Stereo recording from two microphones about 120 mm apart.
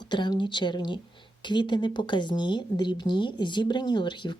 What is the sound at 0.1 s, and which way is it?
A woman's voice, 40° left (ahead or behind).